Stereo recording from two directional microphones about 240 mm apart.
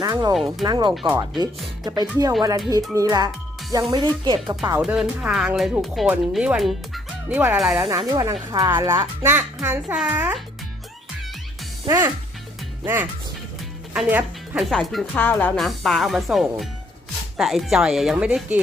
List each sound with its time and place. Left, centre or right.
0.0 s speech: centre
4.8 s speech: centre
11.9 s speech: centre